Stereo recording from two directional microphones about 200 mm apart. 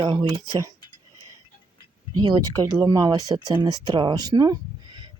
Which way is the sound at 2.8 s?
20° right (ahead or behind).